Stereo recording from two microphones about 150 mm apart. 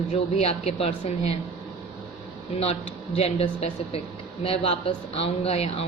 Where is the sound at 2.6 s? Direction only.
45° left (ahead or behind).